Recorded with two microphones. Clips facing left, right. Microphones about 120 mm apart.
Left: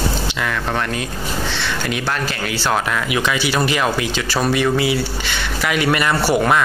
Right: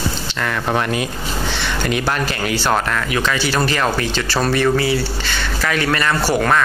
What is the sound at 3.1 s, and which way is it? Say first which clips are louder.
Speech: even; 10° left (ahead or behind).